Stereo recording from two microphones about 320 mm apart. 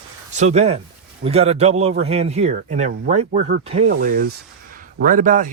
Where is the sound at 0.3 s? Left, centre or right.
Right.